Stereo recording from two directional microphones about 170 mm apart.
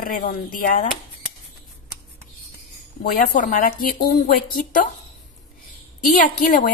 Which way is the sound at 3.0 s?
50° left (ahead or behind).